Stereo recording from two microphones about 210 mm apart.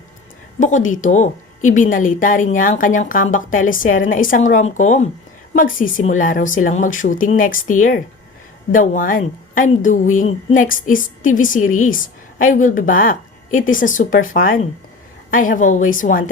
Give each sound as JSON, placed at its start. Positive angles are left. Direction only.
{"t": 0.6, "sound": "a woman's voice", "side_deg": 35}